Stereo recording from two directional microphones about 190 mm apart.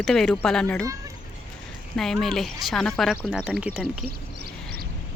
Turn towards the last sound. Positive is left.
turn(degrees=-5)  # may be behind; listen again after turning